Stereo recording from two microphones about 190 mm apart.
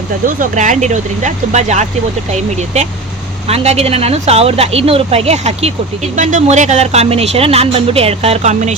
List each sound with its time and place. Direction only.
0.3 s speech: 40° right (ahead or behind)
3.5 s speech: 35° right (ahead or behind)